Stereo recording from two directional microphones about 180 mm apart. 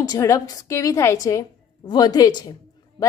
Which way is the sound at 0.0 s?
20° left (ahead or behind).